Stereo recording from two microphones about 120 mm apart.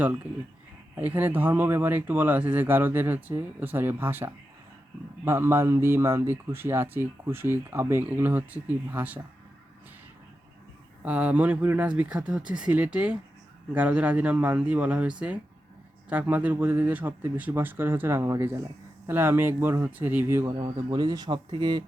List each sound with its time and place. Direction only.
0.9 s speech: 15° right (ahead or behind)
11.0 s speech: 10° right (ahead or behind)
20.6 s speech: 35° right (ahead or behind)